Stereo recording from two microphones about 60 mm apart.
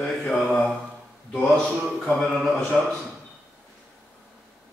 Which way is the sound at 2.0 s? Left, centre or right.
Centre.